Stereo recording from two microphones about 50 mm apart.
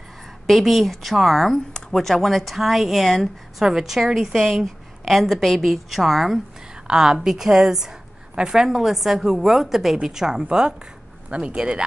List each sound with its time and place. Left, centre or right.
0.5 s speech: centre
6.9 s a woman's voice: centre